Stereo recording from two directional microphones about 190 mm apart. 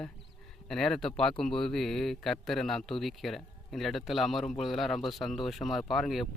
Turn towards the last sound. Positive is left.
turn(degrees=0)  # may be behind; listen again after turning